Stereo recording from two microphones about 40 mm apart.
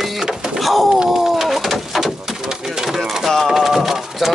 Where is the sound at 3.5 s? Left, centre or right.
Centre.